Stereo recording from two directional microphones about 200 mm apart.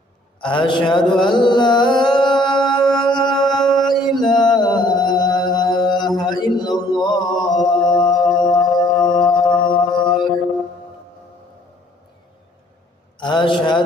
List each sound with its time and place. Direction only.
0.4 s carnatic music: 25° left (ahead or behind)
2.0 s music: 25° left (ahead or behind)
3.4 s music: centre (ahead or behind)
3.8 s mantra: 20° left (ahead or behind)
7.7 s singing bowl: 20° left (ahead or behind)
9.6 s music: 25° left (ahead or behind)
13.1 s a man's voice: 25° left (ahead or behind)